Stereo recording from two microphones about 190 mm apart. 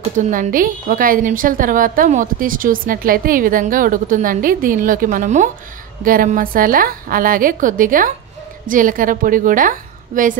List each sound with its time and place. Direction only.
0.2 s a woman's voice: 45° right (ahead or behind)